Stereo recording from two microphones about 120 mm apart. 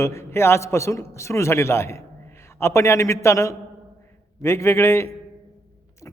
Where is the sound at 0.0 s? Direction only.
25° left (ahead or behind).